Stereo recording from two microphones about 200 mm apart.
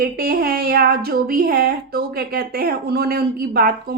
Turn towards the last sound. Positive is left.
turn(degrees=-50)  # may be behind; listen again after turning